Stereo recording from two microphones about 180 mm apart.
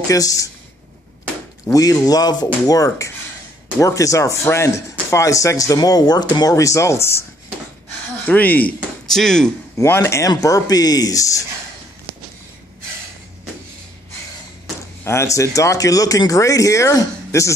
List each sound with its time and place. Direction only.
0.1 s speech: 20° left (ahead or behind)
1.7 s speech: 20° left (ahead or behind)
8.3 s speech: 10° left (ahead or behind)
9.8 s speech: 15° left (ahead or behind)
15.0 s speech: 15° left (ahead or behind)